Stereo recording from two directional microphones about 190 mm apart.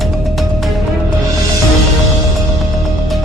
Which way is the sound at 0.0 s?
Centre (ahead or behind).